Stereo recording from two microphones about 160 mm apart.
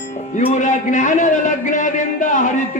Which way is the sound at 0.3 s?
50° left (ahead or behind).